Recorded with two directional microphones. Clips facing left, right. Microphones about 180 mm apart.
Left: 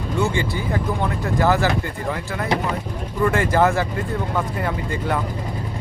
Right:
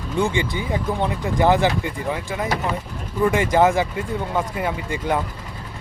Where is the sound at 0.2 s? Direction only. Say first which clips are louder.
Right 1 dB; 15° right (ahead or behind).